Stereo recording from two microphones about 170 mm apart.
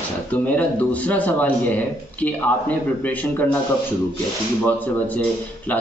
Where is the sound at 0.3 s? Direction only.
10° left (ahead or behind).